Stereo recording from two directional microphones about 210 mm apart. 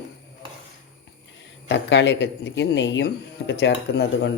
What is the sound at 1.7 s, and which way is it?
Speech, 60° left (ahead or behind).